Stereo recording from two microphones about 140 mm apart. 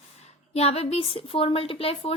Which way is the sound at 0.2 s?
50° left (ahead or behind).